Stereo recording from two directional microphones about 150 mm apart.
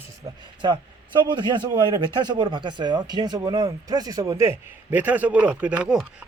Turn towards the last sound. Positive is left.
turn(degrees=-5)  # may be behind; listen again after turning